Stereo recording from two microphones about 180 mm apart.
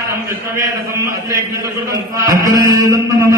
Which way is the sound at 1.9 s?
20° right (ahead or behind).